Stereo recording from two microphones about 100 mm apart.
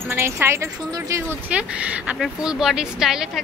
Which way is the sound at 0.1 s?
25° right (ahead or behind).